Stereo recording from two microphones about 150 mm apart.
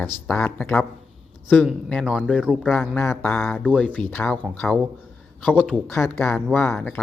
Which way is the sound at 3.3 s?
5° left (ahead or behind).